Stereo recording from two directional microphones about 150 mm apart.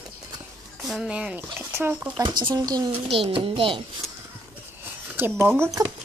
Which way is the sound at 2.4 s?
25° right (ahead or behind).